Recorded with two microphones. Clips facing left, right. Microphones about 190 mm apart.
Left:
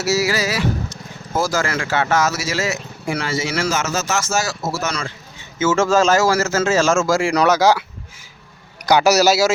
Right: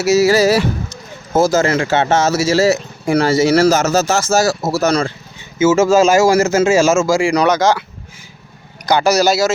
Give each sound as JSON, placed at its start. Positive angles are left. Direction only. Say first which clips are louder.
{"t": 0.0, "sound": "speech", "louder": "right 8 dB", "side_deg": -20}
{"t": 5.5, "sound": "a man's voice", "louder": "right 5 dB", "side_deg": -10}
{"t": 8.9, "sound": "speech", "louder": "right 1 dB", "side_deg": 5}